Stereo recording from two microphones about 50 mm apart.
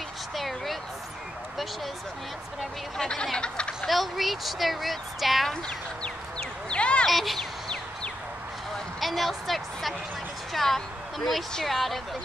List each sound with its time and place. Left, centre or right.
0.4 s a sound: centre
3.0 s speech: centre
3.8 s speech: centre
6.7 s a sound: left
7.1 s speech: centre
9.0 s a woman's voice: centre